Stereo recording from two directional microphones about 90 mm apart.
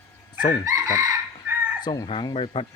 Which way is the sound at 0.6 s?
40° right (ahead or behind).